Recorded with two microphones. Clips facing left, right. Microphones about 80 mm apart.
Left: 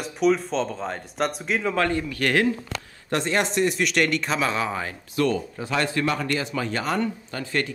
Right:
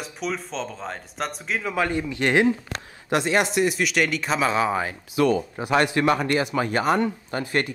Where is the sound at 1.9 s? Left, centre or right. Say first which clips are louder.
Right 1 dB; centre.